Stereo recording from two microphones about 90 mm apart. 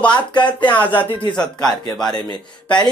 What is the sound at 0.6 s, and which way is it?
Speech, 20° left (ahead or behind).